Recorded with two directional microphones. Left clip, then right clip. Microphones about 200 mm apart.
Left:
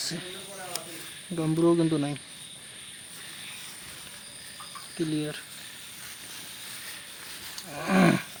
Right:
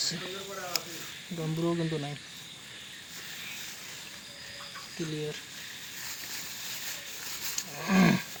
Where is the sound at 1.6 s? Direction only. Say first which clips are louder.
Left 8 dB; 65° left (ahead or behind).